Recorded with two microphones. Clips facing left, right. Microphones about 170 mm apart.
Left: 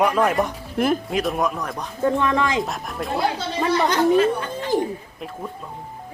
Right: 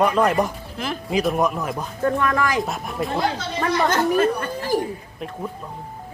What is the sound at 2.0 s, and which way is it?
Speech, 20° left (ahead or behind).